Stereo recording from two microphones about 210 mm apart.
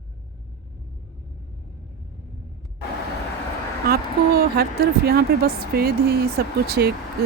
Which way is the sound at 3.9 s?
50° right (ahead or behind).